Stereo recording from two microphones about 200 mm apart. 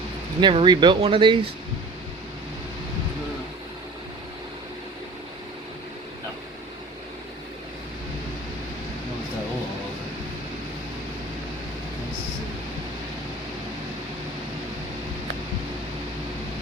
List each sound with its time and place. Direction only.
0.3 s speech: 25° right (ahead or behind)